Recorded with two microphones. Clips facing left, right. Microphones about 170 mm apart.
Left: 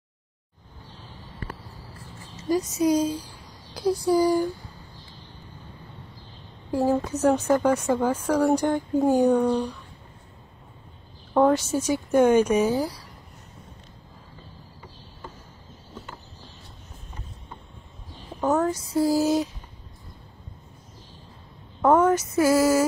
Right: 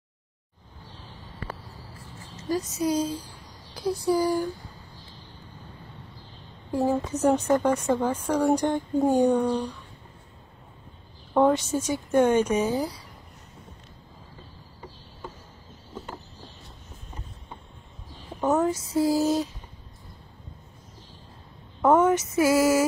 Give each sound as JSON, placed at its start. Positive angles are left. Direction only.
{"t": 2.4, "sound": "speech", "side_deg": 15}
{"t": 6.7, "sound": "speech", "side_deg": 10}
{"t": 11.3, "sound": "speech", "side_deg": 0}
{"t": 18.4, "sound": "a sound", "side_deg": -5}
{"t": 19.1, "sound": "speech", "side_deg": 10}
{"t": 21.8, "sound": "a woman's voice", "side_deg": 0}
{"t": 22.4, "sound": "a sound", "side_deg": -25}